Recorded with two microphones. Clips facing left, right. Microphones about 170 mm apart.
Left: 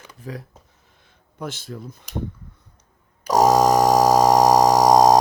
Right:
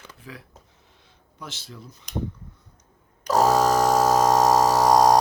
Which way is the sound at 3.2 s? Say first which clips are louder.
Left 3 dB; 15° left (ahead or behind).